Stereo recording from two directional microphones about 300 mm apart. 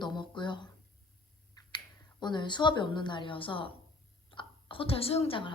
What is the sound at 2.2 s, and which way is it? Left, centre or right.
A woman's voice, centre.